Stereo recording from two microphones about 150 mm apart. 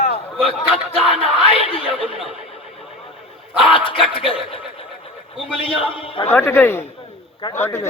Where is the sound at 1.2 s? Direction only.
35° left (ahead or behind).